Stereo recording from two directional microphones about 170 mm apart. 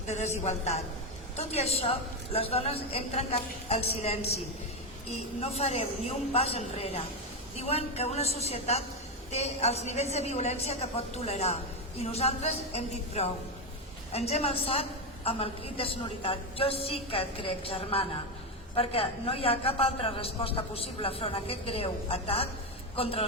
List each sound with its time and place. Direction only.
0.0 s a woman's voice: 40° left (ahead or behind)